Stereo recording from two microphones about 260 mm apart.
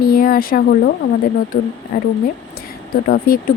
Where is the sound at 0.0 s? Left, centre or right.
Left.